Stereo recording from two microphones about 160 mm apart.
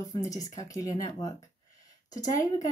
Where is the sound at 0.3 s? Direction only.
20° left (ahead or behind).